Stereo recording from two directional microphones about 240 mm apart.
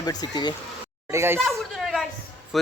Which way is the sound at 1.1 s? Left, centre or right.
Centre.